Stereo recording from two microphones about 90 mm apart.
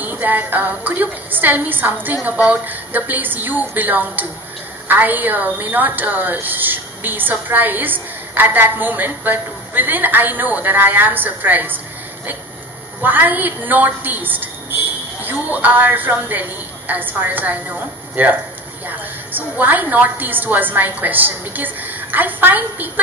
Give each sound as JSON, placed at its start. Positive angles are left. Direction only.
{"t": 0.0, "sound": "a woman's voice", "side_deg": -20}
{"t": 13.0, "sound": "a woman's voice", "side_deg": -20}